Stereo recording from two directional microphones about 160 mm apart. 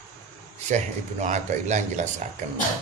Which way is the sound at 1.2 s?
50° right (ahead or behind).